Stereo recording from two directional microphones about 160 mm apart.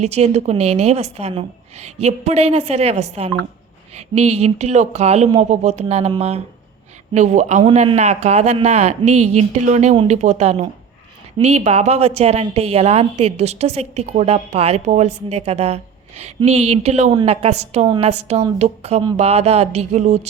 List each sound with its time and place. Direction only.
0.0 s a woman's voice: 45° right (ahead or behind)